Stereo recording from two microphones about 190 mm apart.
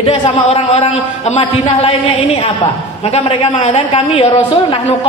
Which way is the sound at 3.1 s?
30° left (ahead or behind).